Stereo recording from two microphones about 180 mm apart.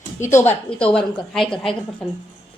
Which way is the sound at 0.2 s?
15° left (ahead or behind).